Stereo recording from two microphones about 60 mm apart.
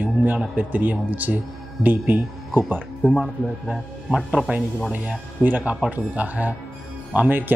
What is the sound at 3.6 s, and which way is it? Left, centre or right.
Speech, centre.